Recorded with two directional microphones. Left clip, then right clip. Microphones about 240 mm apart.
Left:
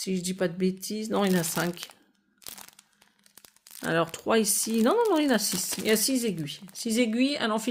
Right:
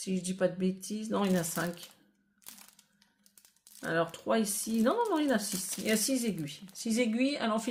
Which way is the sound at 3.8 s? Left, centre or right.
Left.